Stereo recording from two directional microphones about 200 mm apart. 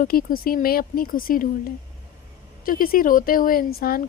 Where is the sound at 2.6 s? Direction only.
45° left (ahead or behind).